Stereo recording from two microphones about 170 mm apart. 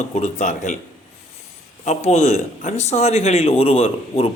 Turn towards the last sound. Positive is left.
turn(degrees=35)  # may be behind; listen again after turning